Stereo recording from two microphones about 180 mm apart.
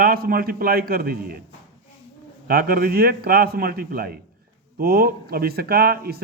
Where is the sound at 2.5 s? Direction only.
55° right (ahead or behind).